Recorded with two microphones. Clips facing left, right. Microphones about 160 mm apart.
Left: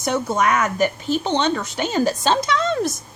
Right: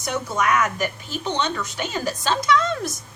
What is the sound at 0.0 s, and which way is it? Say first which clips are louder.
Speech: left 4 dB; 30° left (ahead or behind).